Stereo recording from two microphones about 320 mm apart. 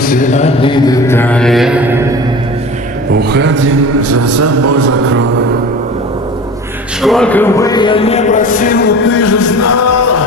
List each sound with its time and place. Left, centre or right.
0.0 s mantra: left; by 2.0 s centre
3.1 s a man's voice: right
7.0 s mantra: centre; by 8.9 s left
9.0 s a sound: left